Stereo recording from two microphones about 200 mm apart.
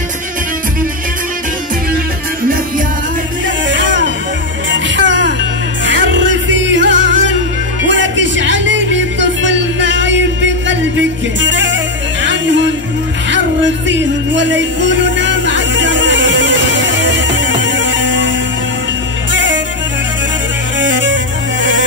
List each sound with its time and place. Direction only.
3.6 s music: 65° right (ahead or behind)
19.3 s music: 65° right (ahead or behind)
20.8 s music: 65° right (ahead or behind)